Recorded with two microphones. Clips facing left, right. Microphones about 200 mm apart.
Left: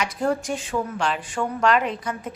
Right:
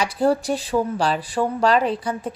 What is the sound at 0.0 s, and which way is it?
A woman's voice, 35° right (ahead or behind).